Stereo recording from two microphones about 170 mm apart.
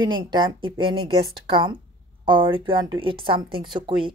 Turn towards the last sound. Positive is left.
turn(degrees=-30)  # may be behind; listen again after turning